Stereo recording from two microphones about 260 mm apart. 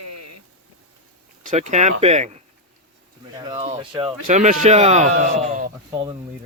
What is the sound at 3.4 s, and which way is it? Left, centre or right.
Speech, centre.